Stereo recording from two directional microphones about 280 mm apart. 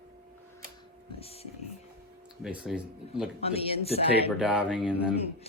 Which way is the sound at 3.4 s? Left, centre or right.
Left.